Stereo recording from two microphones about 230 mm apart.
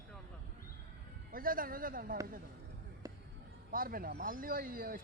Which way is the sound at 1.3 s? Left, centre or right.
Right.